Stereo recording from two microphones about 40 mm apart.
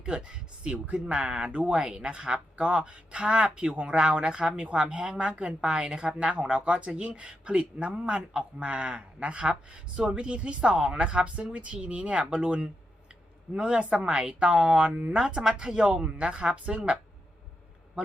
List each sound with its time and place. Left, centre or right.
0.0 s speech: right
14.3 s speech: right